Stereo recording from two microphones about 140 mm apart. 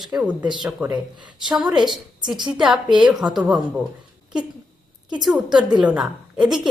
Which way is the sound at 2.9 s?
35° right (ahead or behind).